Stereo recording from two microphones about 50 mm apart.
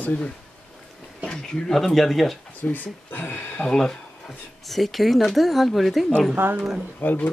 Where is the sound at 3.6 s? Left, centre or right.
Centre.